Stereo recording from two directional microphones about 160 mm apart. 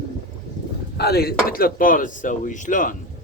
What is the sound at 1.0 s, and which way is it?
Speech, 80° left.